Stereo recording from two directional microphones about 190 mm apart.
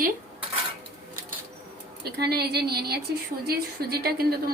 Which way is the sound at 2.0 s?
55° right (ahead or behind).